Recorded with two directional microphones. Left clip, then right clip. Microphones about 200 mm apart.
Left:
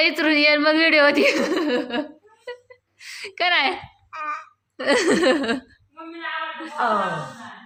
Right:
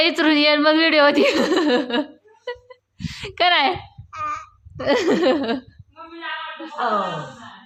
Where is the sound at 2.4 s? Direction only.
15° right (ahead or behind).